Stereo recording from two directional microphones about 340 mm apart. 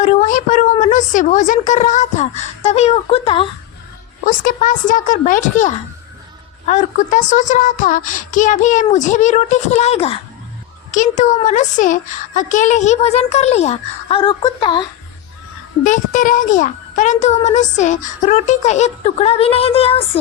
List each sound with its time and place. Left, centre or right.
0.0 s a child's voice: left